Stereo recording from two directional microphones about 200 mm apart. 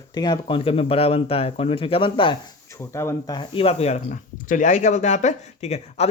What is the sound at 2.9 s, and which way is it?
A man's voice, 15° left (ahead or behind).